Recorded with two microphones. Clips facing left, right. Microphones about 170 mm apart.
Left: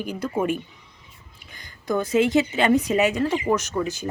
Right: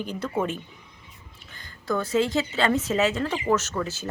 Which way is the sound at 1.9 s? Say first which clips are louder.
Left 4 dB; 20° left (ahead or behind).